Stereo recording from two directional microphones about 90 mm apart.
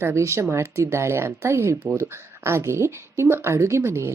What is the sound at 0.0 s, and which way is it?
Speech, 30° right (ahead or behind).